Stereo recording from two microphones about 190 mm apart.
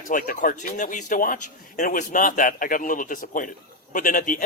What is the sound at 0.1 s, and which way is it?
A man's voice, 45° left (ahead or behind).